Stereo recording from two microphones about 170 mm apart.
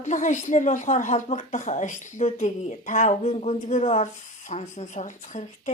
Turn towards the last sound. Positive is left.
turn(degrees=45)  # may be behind; listen again after turning